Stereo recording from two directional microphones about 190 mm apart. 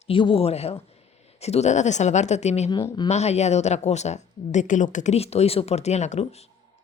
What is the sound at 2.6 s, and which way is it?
Speech, 20° left (ahead or behind).